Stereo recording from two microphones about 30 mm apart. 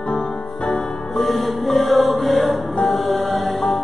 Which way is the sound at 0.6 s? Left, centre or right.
Left.